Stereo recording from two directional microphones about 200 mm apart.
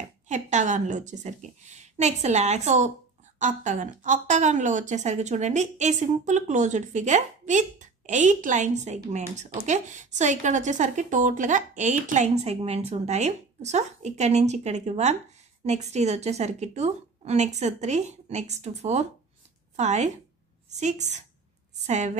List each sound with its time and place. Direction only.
0.3 s a woman's voice: 35° right (ahead or behind)